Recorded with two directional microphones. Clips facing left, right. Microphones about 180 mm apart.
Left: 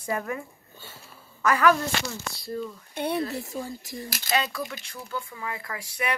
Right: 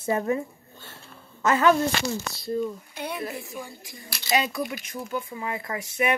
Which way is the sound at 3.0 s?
30° left (ahead or behind).